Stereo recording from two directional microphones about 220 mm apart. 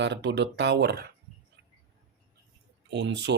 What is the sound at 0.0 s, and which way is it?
Speech, 50° right (ahead or behind).